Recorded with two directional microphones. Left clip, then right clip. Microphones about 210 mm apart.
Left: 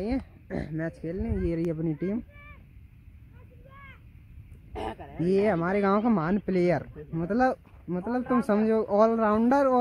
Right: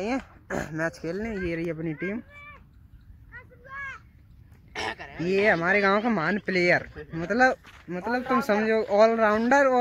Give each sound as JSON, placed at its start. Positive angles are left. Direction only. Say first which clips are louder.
{"t": 0.0, "sound": "speech", "louder": "right 2 dB", "side_deg": 0}
{"t": 4.7, "sound": "a sound", "louder": "right 3 dB", "side_deg": 30}
{"t": 5.1, "sound": "speech", "louder": "right 2 dB", "side_deg": 5}